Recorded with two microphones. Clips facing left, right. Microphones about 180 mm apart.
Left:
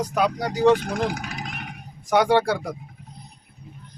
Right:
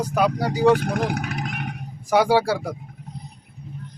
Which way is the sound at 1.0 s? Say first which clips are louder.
Right 1 dB; 60° right (ahead or behind).